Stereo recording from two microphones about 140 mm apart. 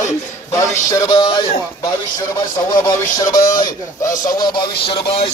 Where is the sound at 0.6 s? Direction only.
25° left (ahead or behind).